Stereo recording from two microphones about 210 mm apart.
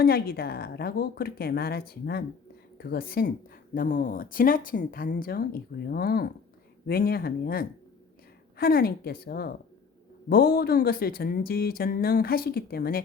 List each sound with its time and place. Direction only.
0.0 s speech: 45° left (ahead or behind)